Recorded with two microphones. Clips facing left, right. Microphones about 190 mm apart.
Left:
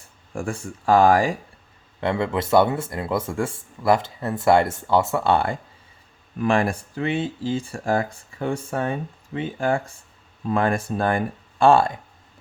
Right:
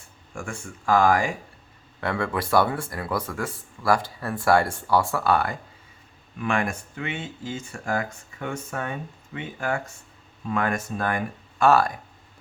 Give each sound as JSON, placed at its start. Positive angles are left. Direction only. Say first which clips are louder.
{"t": 0.3, "sound": "speech", "louder": "left 6 dB", "side_deg": 35}
{"t": 2.0, "sound": "speech", "louder": "left 4 dB", "side_deg": 20}